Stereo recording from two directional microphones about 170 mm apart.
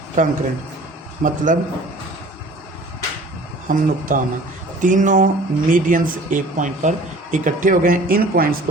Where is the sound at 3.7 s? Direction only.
55° right (ahead or behind).